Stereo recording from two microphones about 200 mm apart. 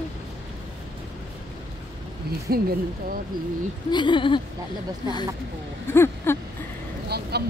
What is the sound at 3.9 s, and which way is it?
Speech, 25° left (ahead or behind).